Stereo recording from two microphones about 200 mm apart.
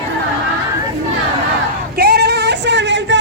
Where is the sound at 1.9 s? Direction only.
50° right (ahead or behind).